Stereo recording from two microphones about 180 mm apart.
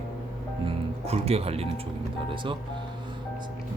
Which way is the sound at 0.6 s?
35° right (ahead or behind).